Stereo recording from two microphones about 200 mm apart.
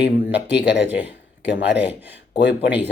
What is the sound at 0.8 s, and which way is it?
Speech, 10° right (ahead or behind).